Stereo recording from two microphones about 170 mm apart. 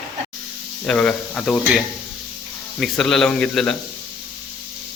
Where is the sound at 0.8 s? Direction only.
5° left (ahead or behind).